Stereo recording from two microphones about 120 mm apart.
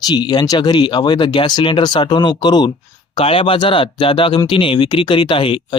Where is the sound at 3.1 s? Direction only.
50° left (ahead or behind).